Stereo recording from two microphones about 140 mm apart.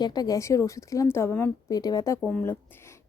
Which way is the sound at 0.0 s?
30° left (ahead or behind).